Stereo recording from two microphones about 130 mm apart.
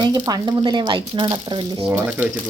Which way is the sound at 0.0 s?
30° right (ahead or behind).